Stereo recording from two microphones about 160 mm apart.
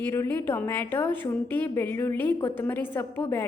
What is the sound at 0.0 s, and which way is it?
A woman's voice, 15° left (ahead or behind).